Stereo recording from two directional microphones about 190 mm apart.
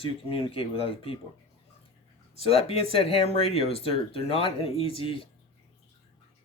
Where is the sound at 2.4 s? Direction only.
30° left (ahead or behind).